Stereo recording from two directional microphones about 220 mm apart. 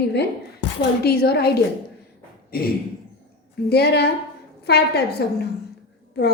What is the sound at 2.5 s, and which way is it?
Speech, 45° left (ahead or behind).